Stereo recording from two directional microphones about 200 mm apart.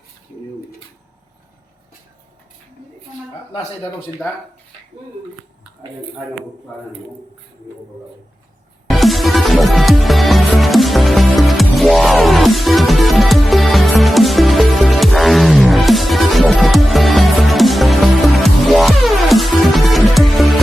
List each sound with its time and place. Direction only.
8.9 s music: centre (ahead or behind)